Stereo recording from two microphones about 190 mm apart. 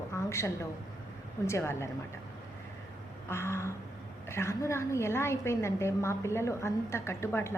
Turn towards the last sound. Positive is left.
turn(degrees=15)  # may be behind; listen again after turning